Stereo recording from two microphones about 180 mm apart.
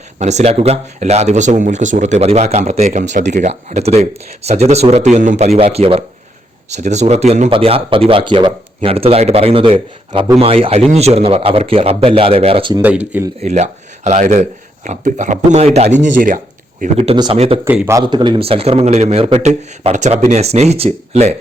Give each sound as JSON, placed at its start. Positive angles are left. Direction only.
{"t": 0.2, "sound": "speech", "side_deg": -40}
{"t": 17.0, "sound": "speech", "side_deg": -30}
{"t": 17.7, "sound": "speech", "side_deg": -10}
{"t": 18.0, "sound": "speech", "side_deg": -25}